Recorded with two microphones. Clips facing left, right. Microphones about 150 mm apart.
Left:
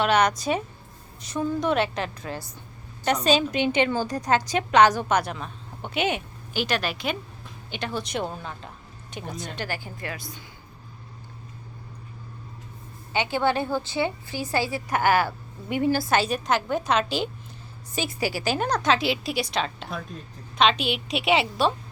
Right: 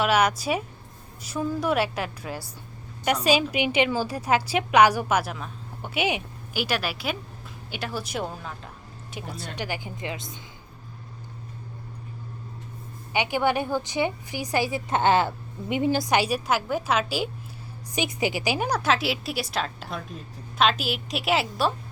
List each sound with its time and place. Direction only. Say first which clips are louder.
0.0 s a woman's voice: left 1 dB; 5° right (ahead or behind); by 10.4 s 20° right (ahead or behind)
13.1 s a woman's voice: even; 15° right (ahead or behind)
17.9 s a woman's voice: right 1 dB; 20° right (ahead or behind); by 21.7 s centre (ahead or behind)